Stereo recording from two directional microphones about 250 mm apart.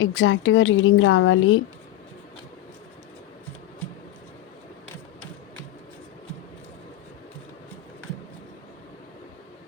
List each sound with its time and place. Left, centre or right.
0.0 s a woman's voice: left